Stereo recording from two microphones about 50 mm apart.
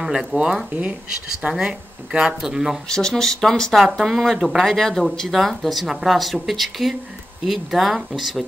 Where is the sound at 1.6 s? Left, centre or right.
Centre.